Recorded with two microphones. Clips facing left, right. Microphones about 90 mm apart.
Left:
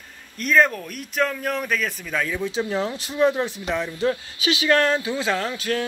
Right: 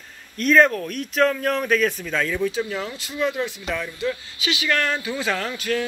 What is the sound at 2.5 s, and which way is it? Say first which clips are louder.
Speech: left 2 dB; 30° left (ahead or behind).